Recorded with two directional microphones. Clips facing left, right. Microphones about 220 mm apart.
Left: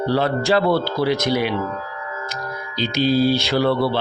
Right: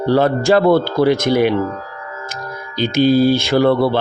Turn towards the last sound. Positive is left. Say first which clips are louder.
# right 5 dB
turn(degrees=-50)  # may be behind; listen again after turning